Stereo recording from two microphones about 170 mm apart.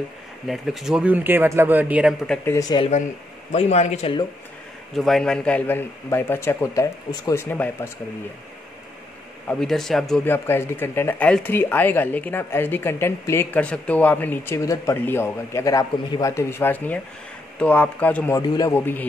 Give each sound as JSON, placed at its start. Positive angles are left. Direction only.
{"t": 0.5, "sound": "a man's voice", "side_deg": 0}
{"t": 2.2, "sound": "speech", "side_deg": 5}
{"t": 2.5, "sound": "speech", "side_deg": 20}
{"t": 3.5, "sound": "a man's voice", "side_deg": 40}
{"t": 4.9, "sound": "speech", "side_deg": 0}
{"t": 9.5, "sound": "speech", "side_deg": 5}
{"t": 18.4, "sound": "speech", "side_deg": 20}